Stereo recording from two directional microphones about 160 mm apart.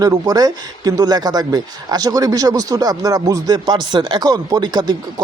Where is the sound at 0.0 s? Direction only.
25° right (ahead or behind).